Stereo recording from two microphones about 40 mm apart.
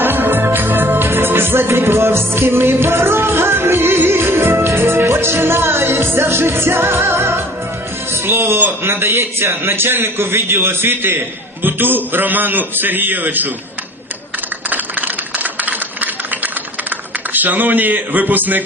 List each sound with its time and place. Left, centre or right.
0.0 s music: right
8.1 s a man's voice: right
11.6 s a man's voice: right
14.7 s a sound: right
17.3 s a man's voice: right